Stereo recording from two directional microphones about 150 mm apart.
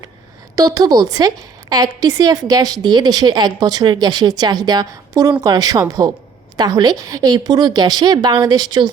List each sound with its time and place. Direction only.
0.5 s a woman's voice: 25° right (ahead or behind)